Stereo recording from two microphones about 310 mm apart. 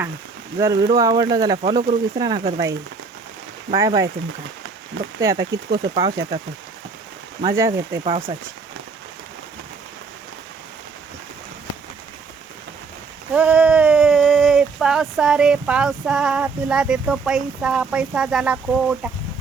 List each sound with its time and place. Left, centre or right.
0.6 s speech: centre
5.2 s speech: centre
7.4 s speech: centre
13.3 s speech: centre